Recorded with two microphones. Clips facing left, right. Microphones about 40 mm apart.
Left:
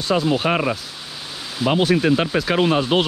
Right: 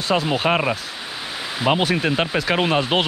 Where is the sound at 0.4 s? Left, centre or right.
Centre.